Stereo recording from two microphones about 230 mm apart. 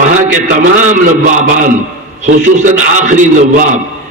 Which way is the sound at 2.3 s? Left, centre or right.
Right.